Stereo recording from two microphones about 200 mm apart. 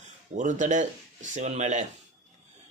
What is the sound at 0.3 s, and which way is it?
Speech, 40° right (ahead or behind).